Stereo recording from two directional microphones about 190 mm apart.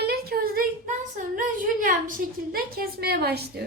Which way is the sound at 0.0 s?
55° right (ahead or behind).